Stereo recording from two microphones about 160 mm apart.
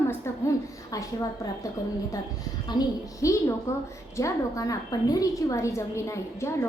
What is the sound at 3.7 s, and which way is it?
A woman's voice, 15° left (ahead or behind).